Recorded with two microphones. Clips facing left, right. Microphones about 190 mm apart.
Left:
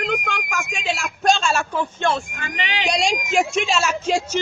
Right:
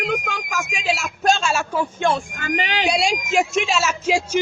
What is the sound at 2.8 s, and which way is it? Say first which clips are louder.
Speech: left 2 dB; 5° right (ahead or behind).